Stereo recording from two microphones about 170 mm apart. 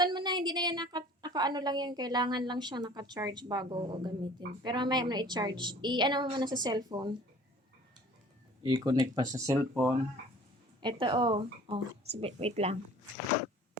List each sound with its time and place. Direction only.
0.0 s a woman's voice: 25° right (ahead or behind)
8.7 s a woman's voice: 25° right (ahead or behind)
10.8 s a woman's voice: 30° right (ahead or behind)